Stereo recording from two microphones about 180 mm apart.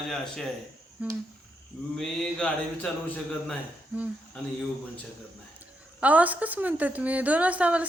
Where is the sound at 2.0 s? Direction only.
5° left (ahead or behind).